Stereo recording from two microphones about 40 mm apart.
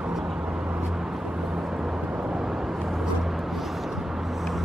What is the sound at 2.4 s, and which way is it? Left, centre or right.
Vehicle, centre.